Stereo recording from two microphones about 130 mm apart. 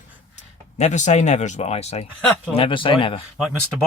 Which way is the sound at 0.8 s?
65° left (ahead or behind).